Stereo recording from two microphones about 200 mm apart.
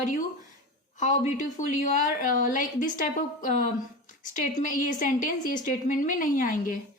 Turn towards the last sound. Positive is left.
turn(degrees=45)  # may be behind; listen again after turning